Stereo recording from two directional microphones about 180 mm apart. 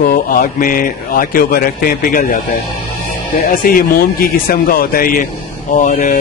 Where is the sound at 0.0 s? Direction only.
50° left (ahead or behind).